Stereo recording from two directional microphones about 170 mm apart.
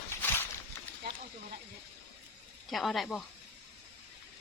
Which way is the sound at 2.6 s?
Centre (ahead or behind).